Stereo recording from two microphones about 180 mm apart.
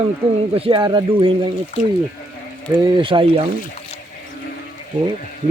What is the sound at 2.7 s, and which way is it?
Speech, 30° right (ahead or behind).